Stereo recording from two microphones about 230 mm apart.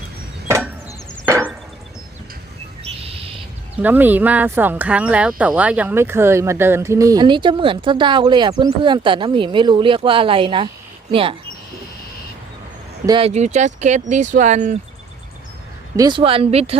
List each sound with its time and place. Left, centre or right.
0.4 s chop: centre
3.8 s speech: centre
13.1 s speech: right
16.0 s speech: centre